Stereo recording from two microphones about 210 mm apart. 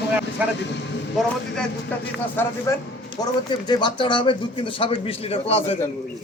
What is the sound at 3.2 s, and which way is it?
Speech, 20° left (ahead or behind).